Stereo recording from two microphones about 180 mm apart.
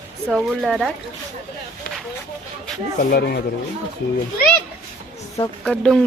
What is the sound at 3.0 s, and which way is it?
Speech, 60° left (ahead or behind).